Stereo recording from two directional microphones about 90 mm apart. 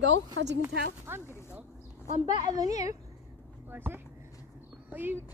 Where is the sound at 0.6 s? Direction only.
30° right (ahead or behind).